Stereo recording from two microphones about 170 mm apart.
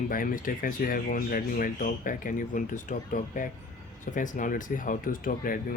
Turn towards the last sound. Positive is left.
turn(degrees=55)  # may be behind; listen again after turning